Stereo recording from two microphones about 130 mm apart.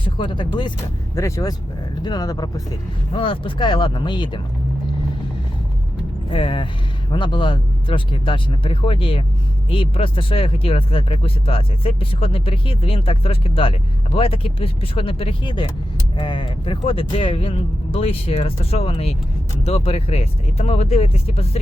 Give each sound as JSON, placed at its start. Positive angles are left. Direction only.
{"t": 0.0, "sound": "speech", "side_deg": 40}
{"t": 1.1, "sound": "speech", "side_deg": 25}
{"t": 3.1, "sound": "speech", "side_deg": 40}
{"t": 6.3, "sound": "speech", "side_deg": 45}